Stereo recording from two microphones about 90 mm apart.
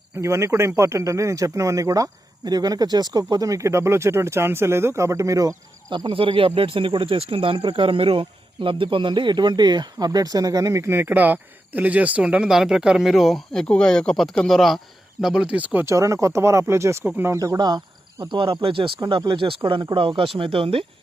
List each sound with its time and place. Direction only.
0.2 s speech: 30° right (ahead or behind)
5.9 s speech: 75° right (ahead or behind); by 15.9 s 20° right (ahead or behind)
15.9 s speech: 35° right (ahead or behind)
17.6 s speech: 55° right (ahead or behind); by 18.9 s 75° right (ahead or behind)
19.0 s speech: 65° right (ahead or behind)
20.4 s speech: 85° right